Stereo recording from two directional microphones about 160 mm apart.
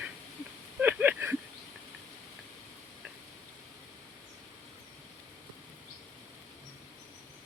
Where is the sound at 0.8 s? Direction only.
10° right (ahead or behind).